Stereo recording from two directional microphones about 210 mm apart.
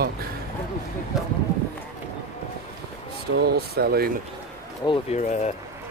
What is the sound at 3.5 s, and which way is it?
Speech, 50° right (ahead or behind).